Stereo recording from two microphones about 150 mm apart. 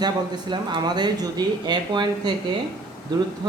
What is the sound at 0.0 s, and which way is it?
Speech, 30° right (ahead or behind).